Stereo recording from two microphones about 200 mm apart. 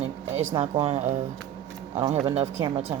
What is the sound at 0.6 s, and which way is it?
Speech, 30° right (ahead or behind).